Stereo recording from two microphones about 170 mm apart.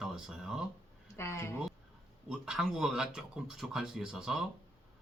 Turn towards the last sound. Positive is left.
turn(degrees=-5)  # may be behind; listen again after turning